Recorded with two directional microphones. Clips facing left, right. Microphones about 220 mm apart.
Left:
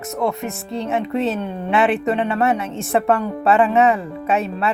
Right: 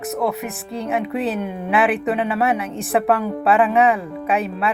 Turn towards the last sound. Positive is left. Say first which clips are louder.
# left 1 dB
turn(degrees=0)  # may be behind; listen again after turning